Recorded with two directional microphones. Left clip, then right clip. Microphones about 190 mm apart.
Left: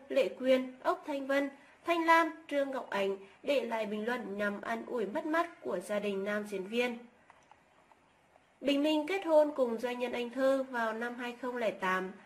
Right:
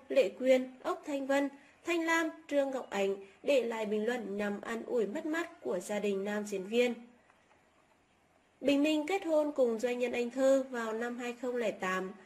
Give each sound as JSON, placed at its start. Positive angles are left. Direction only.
{"t": 0.1, "sound": "a woman's voice", "side_deg": -35}
{"t": 8.8, "sound": "a woman's voice", "side_deg": -35}